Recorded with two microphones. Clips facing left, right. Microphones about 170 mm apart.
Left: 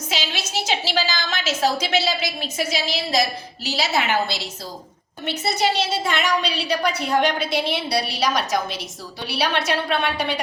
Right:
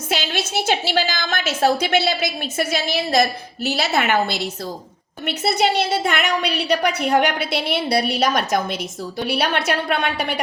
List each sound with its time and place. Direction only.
0.1 s a woman's voice: 55° right (ahead or behind)